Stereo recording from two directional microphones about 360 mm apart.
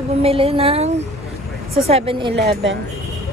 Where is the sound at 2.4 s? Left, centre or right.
Right.